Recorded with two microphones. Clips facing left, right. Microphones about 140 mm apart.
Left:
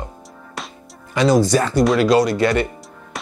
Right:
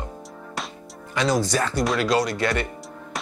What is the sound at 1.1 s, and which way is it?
Speech, 10° left (ahead or behind).